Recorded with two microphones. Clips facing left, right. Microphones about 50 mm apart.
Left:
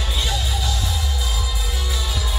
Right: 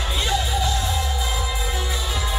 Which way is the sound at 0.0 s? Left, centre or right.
Centre.